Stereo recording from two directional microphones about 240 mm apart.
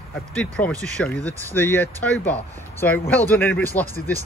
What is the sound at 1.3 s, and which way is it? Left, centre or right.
Speech, centre.